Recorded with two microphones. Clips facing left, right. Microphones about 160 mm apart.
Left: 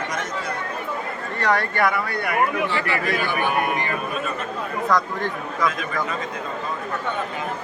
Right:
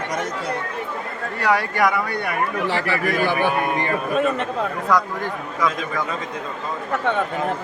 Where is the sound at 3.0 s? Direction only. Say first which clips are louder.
Right 4 dB; 40° right (ahead or behind).